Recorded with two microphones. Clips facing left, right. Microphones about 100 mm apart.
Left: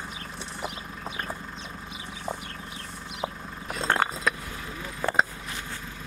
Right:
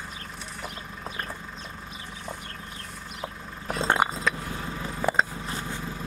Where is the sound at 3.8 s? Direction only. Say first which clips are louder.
Right 1 dB; 15° right (ahead or behind).